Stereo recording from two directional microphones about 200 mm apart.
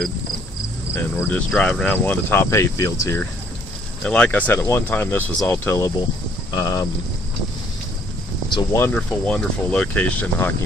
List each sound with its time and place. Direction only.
0.9 s speech: 10° left (ahead or behind)
8.5 s speech: 15° left (ahead or behind)